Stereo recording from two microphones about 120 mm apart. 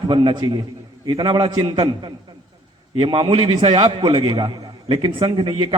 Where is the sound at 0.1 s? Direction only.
40° right (ahead or behind).